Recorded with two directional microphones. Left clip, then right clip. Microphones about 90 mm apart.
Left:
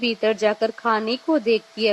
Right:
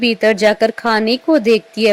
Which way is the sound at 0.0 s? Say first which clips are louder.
Right 8 dB; 50° right (ahead or behind).